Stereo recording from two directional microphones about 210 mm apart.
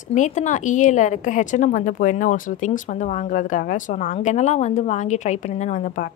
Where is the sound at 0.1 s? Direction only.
35° left (ahead or behind).